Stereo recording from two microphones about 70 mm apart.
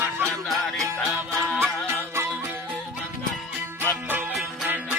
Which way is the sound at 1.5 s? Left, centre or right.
Right.